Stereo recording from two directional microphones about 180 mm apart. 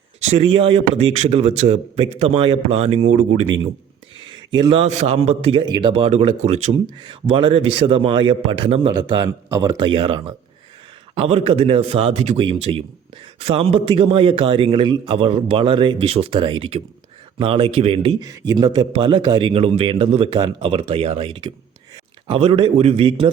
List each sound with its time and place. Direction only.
0.3 s a man's voice: 30° right (ahead or behind)
4.2 s a man's voice: 25° right (ahead or behind)
7.0 s a man's voice: 30° right (ahead or behind)
18.3 s a man's voice: 20° right (ahead or behind)